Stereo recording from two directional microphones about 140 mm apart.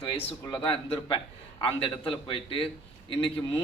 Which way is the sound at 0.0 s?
35° left (ahead or behind).